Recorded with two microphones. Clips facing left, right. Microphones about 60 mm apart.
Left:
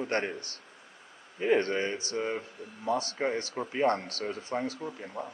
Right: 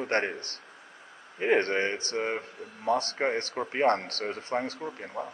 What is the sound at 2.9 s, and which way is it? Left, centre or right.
Speech, right.